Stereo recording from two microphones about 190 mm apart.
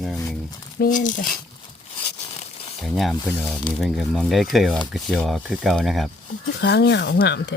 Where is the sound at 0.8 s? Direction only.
40° left (ahead or behind).